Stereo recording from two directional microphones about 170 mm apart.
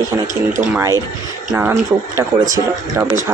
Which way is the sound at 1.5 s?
10° right (ahead or behind).